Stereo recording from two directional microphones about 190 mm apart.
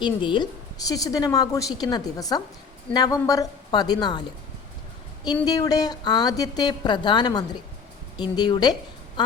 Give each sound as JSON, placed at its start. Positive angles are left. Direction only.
{"t": 0.0, "sound": "a woman's voice", "side_deg": 25}